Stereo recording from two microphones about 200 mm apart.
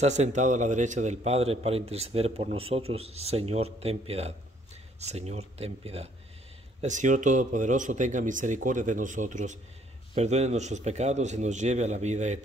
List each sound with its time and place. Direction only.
0.0 s a man's voice: 35° right (ahead or behind)